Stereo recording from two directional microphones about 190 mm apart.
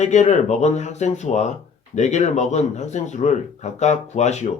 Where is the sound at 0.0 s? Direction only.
40° left (ahead or behind).